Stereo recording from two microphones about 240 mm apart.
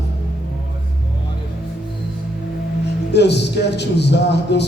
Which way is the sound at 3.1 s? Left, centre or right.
Left.